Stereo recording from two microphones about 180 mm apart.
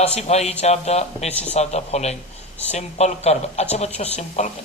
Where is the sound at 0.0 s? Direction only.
35° left (ahead or behind).